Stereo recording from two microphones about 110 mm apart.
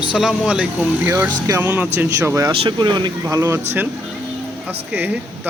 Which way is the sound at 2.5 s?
45° right (ahead or behind).